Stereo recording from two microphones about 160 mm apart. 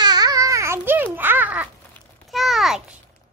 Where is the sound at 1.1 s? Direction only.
10° right (ahead or behind).